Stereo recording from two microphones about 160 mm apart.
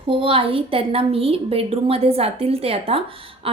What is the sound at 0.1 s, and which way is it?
Speech, 35° right (ahead or behind).